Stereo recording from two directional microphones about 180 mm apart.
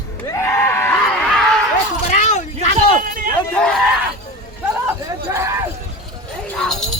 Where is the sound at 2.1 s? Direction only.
40° left (ahead or behind).